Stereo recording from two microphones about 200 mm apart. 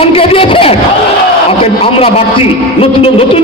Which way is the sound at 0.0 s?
30° left (ahead or behind).